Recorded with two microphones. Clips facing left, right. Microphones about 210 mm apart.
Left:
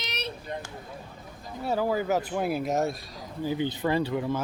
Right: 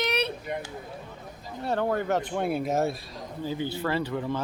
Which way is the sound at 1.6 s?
5° left (ahead or behind).